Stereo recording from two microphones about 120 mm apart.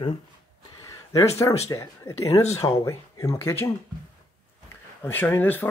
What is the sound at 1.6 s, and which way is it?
Speech, 25° left (ahead or behind).